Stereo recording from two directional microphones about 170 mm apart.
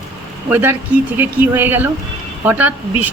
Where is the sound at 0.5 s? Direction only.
15° right (ahead or behind).